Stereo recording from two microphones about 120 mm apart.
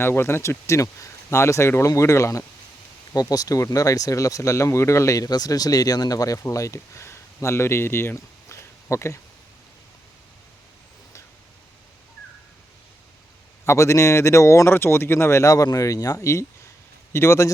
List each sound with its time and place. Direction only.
0.0 s speech: 20° left (ahead or behind)
13.7 s speech: 25° left (ahead or behind)